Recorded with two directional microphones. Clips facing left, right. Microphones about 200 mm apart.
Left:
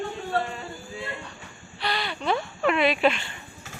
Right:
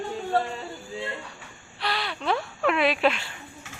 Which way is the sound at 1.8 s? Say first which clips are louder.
Left 1 dB; centre (ahead or behind).